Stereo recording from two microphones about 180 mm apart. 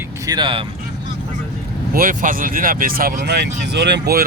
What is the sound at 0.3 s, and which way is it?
Speech, 25° right (ahead or behind).